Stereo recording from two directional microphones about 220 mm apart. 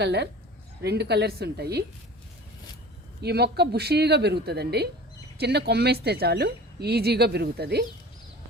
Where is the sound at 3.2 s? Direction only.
45° right (ahead or behind).